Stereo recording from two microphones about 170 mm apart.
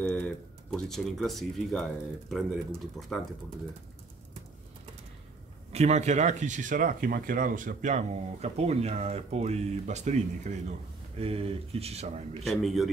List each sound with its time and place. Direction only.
0.0 s speech: 5° left (ahead or behind)
5.7 s speech: 40° right (ahead or behind)
12.4 s speech: centre (ahead or behind)